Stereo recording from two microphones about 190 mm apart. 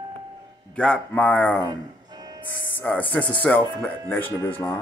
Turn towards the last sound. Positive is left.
turn(degrees=10)  # may be behind; listen again after turning